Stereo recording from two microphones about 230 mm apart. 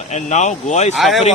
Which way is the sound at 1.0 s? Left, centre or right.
Centre.